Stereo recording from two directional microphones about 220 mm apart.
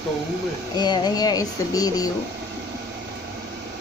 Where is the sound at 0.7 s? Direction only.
20° left (ahead or behind).